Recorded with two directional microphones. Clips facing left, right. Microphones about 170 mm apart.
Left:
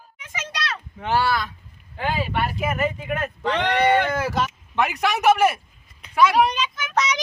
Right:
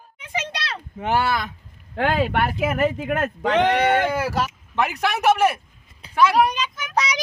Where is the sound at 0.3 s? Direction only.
30° right (ahead or behind).